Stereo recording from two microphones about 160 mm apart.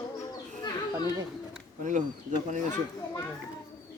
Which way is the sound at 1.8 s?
50° right (ahead or behind).